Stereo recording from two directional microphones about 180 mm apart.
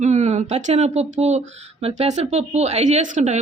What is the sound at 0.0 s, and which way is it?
A woman's voice, 40° right (ahead or behind).